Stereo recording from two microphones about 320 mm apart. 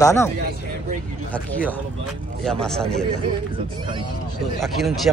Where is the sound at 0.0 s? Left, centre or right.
Centre.